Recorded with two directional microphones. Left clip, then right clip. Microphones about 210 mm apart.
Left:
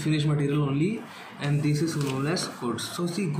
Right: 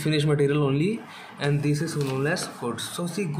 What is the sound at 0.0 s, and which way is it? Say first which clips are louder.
Speech: right 5 dB; 55° right (ahead or behind).